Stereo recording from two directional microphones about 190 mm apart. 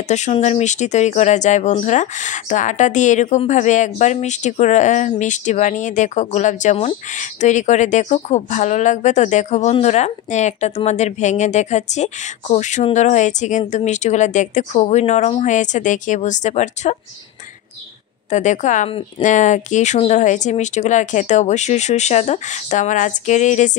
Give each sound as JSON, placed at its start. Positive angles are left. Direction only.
{"t": 0.1, "sound": "speech", "side_deg": 35}
{"t": 18.3, "sound": "speech", "side_deg": 40}